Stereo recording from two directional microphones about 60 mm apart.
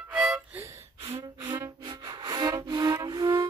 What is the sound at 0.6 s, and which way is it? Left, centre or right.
Gasp, right.